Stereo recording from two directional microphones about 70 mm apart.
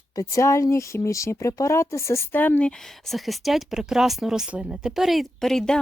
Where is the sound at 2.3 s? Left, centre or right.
Left.